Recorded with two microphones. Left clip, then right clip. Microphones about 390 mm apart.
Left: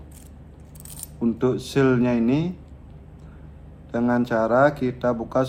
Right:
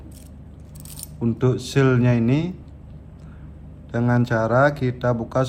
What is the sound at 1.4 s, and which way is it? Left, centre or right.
A man's voice, centre.